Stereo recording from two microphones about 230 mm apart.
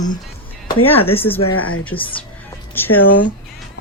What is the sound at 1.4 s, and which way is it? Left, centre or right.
Speech, left.